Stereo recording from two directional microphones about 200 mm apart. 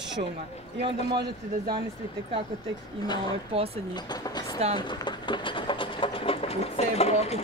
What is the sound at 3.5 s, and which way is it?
Speech, 30° right (ahead or behind).